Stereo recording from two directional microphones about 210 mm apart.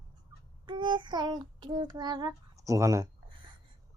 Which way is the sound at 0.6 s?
20° right (ahead or behind).